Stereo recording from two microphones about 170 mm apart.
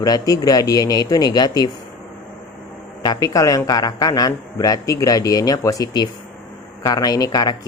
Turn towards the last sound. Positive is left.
turn(degrees=25)  # may be behind; listen again after turning